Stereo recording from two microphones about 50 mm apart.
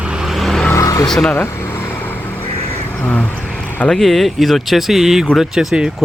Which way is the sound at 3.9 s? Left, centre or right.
Centre.